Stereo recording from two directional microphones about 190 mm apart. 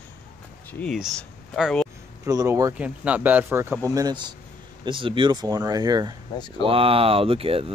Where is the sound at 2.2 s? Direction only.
15° right (ahead or behind).